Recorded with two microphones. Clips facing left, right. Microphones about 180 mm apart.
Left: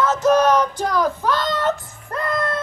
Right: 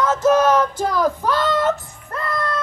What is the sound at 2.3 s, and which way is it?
Music, 20° left (ahead or behind).